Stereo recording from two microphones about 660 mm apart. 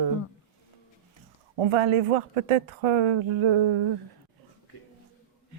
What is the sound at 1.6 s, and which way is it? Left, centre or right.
Speech, right.